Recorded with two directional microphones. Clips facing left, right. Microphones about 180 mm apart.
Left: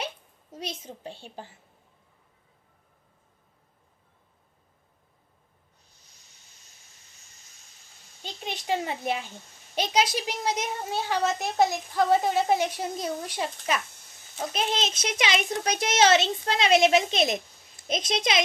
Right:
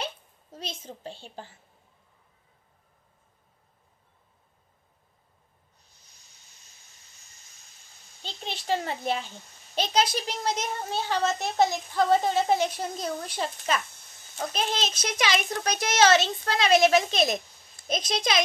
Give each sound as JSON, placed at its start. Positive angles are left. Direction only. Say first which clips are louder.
{"t": 0.0, "sound": "a sound", "louder": "even", "side_deg": 15}
{"t": 1.0, "sound": "a woman's voice", "louder": "even", "side_deg": 15}
{"t": 8.5, "sound": "a woman's voice", "louder": "even", "side_deg": 15}
{"t": 14.5, "sound": "a child's voice", "louder": "left 2 dB", "side_deg": 20}